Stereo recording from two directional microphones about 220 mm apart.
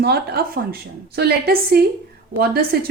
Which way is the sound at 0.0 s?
45° right (ahead or behind).